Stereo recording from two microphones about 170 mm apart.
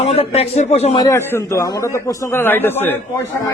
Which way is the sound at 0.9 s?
20° left (ahead or behind).